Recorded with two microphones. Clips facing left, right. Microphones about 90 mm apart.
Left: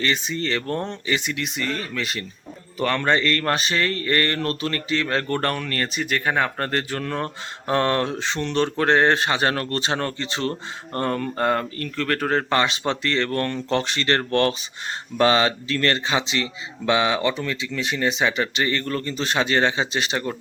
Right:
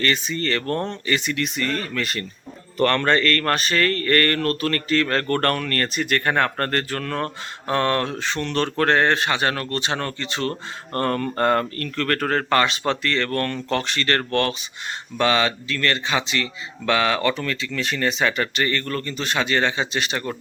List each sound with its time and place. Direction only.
0.0 s speech: 15° left (ahead or behind)
10.9 s speech: 10° left (ahead or behind)